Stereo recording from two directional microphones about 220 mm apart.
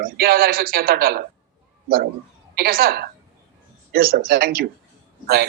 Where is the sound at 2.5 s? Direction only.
45° right (ahead or behind).